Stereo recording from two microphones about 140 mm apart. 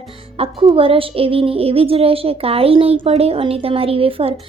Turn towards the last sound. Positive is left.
turn(degrees=-40)  # may be behind; listen again after turning